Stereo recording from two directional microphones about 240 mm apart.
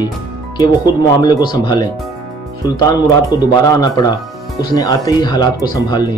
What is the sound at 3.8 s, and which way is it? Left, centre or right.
Speech, centre.